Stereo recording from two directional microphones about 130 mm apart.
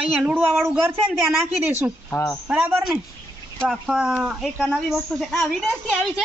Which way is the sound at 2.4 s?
10° right (ahead or behind).